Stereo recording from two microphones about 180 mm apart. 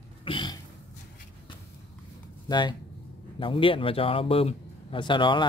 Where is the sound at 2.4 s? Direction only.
25° left (ahead or behind).